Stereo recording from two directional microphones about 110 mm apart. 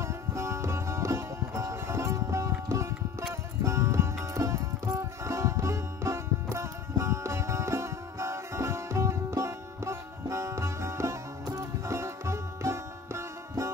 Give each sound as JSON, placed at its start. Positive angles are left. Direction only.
{"t": 0.0, "sound": "sitar", "side_deg": -25}
{"t": 3.6, "sound": "music", "side_deg": -25}